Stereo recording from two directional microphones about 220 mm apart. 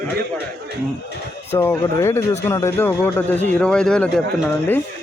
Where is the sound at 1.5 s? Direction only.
10° left (ahead or behind).